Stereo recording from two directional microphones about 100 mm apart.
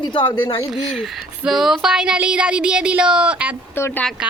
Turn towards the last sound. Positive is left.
turn(degrees=25)  # may be behind; listen again after turning